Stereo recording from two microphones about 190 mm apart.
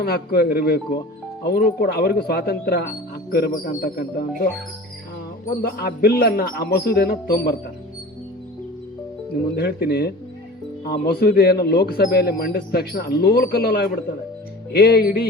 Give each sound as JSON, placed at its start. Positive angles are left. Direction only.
{"t": 0.0, "sound": "a man's voice", "side_deg": 55}
{"t": 5.6, "sound": "a man's voice", "side_deg": 55}
{"t": 9.6, "sound": "a man's voice", "side_deg": 60}